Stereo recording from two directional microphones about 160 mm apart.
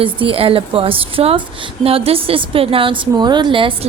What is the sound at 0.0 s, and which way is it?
A woman's voice, 35° right (ahead or behind).